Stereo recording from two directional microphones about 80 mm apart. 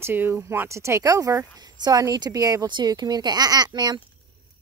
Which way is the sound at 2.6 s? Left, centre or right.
Right.